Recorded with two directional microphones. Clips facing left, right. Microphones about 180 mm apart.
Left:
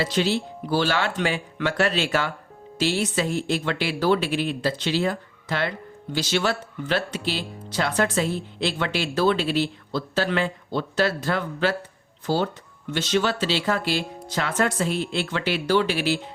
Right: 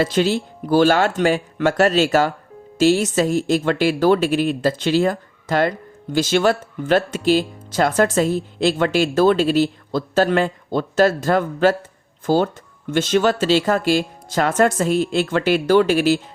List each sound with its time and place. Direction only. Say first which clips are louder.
0.0 s speech: right 5 dB; 50° right (ahead or behind)